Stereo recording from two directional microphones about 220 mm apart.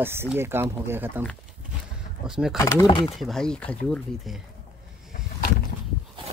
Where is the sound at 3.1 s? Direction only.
Centre (ahead or behind).